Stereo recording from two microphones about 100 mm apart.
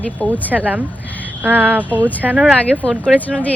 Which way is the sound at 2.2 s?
15° right (ahead or behind).